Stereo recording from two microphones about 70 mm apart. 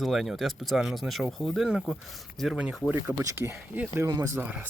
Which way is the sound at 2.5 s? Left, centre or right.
Centre.